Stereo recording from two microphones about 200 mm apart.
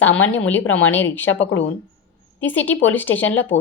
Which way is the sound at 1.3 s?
70° left (ahead or behind).